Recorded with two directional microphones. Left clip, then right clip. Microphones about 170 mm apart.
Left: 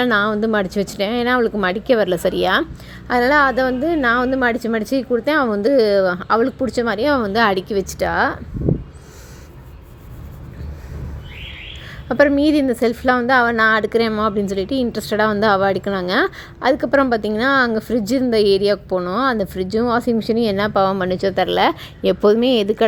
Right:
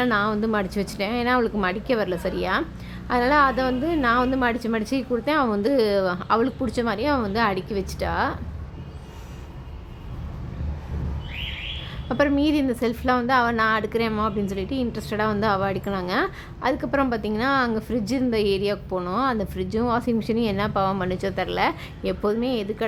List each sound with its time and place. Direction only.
0.0 s a woman's voice: 30° left (ahead or behind)
3.1 s a woman's voice: 30° left (ahead or behind)
12.0 s a woman's voice: 30° left (ahead or behind); by 22.8 s 50° left (ahead or behind)